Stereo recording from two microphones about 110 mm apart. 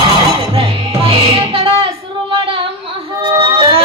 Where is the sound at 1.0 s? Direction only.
55° right (ahead or behind).